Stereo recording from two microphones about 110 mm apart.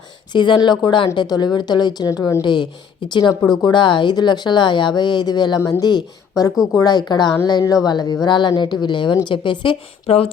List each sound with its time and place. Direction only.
0.3 s speech: 45° left (ahead or behind)
10.1 s speech: 70° left (ahead or behind)